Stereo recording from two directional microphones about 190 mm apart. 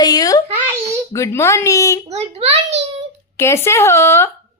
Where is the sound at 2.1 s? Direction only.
35° right (ahead or behind).